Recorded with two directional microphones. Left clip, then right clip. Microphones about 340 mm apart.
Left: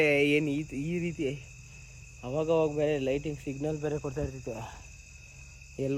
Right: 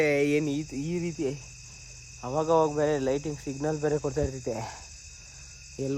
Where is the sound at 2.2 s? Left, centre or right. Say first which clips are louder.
Right 3 dB; centre.